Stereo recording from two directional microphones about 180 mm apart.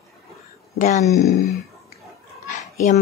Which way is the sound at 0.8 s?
40° left (ahead or behind).